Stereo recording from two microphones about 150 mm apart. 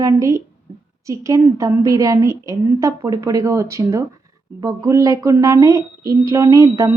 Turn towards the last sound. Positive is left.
turn(degrees=-20)  # may be behind; listen again after turning